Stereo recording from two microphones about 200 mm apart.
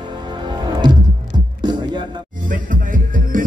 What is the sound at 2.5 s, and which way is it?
Music, 40° right (ahead or behind).